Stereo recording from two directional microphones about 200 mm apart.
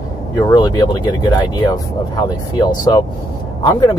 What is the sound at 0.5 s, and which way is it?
Speech, 20° left (ahead or behind).